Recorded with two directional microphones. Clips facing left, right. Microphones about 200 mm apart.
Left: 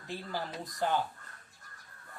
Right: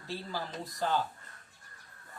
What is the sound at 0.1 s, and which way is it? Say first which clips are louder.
Speech: even; 15° left (ahead or behind).